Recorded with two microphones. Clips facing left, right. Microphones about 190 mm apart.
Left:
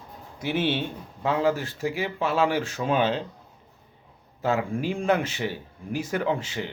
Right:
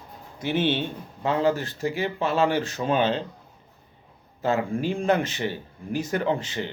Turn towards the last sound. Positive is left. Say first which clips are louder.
# right 1 dB
turn(degrees=5)  # may be behind; listen again after turning